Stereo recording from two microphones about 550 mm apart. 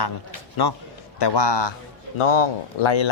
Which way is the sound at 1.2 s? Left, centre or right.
Left.